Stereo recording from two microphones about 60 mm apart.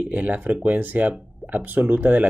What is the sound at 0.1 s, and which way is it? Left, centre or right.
Speech, right.